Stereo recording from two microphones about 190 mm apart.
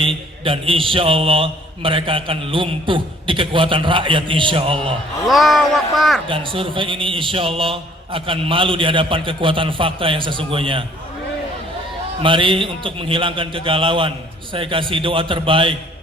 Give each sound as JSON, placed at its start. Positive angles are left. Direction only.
{"t": 0.0, "sound": "a man's voice", "side_deg": -30}
{"t": 5.3, "sound": "speech", "side_deg": 0}
{"t": 6.2, "sound": "a man's voice", "side_deg": -25}
{"t": 12.2, "sound": "a man's voice", "side_deg": -25}